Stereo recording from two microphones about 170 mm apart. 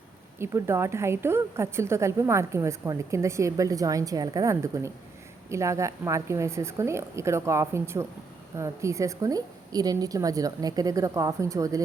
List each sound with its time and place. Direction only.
0.3 s a woman's voice: 15° right (ahead or behind)